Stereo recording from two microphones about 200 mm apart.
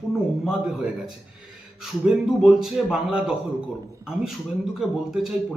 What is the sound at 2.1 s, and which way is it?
A man's voice, centre (ahead or behind).